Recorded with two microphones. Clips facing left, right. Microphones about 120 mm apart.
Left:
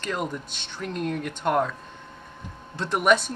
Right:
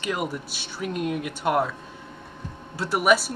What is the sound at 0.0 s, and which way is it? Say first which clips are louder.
Speech: right 1 dB; 5° right (ahead or behind).